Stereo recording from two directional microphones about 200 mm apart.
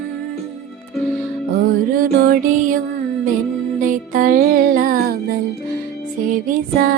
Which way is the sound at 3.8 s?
40° right (ahead or behind).